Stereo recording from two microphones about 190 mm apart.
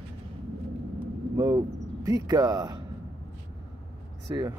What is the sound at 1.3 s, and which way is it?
Vehicle, 20° right (ahead or behind).